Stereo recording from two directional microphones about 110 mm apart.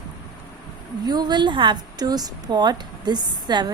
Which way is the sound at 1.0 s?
40° right (ahead or behind).